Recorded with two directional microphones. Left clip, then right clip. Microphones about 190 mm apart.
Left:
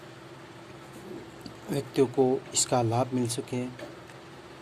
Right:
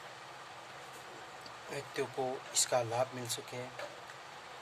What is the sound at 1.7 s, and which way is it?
Speech, 30° left (ahead or behind).